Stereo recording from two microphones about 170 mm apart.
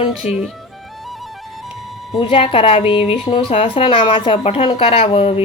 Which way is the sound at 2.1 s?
30° left (ahead or behind).